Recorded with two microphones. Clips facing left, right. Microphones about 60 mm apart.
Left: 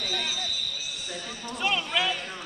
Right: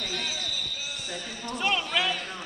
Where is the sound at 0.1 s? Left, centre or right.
Centre.